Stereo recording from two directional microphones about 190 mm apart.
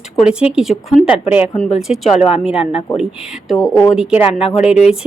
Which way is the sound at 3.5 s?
Centre (ahead or behind).